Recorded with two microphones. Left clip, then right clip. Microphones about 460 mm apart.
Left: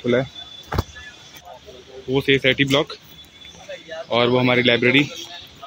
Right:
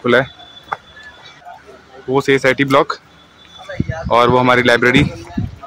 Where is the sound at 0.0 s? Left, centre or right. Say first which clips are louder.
Right 7 dB; left.